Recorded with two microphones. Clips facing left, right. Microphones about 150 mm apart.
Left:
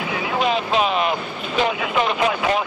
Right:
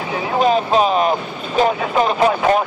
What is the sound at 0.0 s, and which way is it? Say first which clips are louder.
Vehicle: right 4 dB; 35° right (ahead or behind).